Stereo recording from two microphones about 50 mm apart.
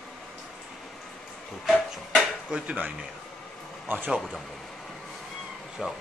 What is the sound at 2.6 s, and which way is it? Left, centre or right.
Speech, right.